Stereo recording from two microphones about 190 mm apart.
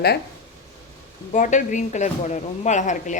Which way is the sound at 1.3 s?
40° left (ahead or behind).